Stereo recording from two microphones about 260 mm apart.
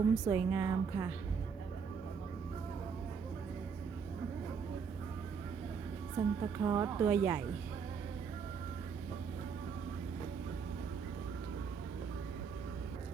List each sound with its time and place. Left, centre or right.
0.3 s speech: centre
6.1 s speech: centre